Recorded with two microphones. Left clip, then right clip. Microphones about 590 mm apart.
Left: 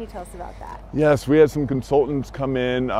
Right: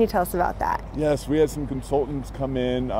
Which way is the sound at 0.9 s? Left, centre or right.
Left.